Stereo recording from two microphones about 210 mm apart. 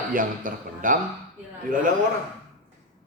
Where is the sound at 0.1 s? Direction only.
40° right (ahead or behind).